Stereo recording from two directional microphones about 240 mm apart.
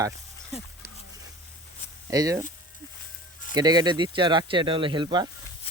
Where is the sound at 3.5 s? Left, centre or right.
Centre.